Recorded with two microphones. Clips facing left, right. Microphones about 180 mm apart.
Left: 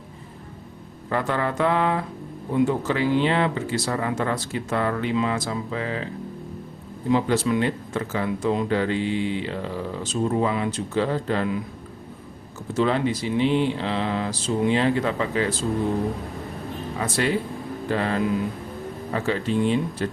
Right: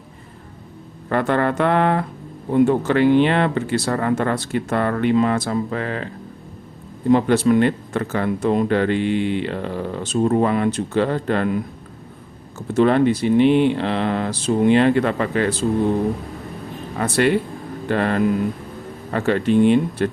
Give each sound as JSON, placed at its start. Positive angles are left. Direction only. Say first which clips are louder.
{"t": 1.1, "sound": "speech", "louder": "right 5 dB", "side_deg": -60}
{"t": 7.1, "sound": "speech", "louder": "right 6 dB", "side_deg": -60}
{"t": 12.7, "sound": "speech", "louder": "right 7 dB", "side_deg": -60}
{"t": 17.0, "sound": "speech", "louder": "right 6 dB", "side_deg": -60}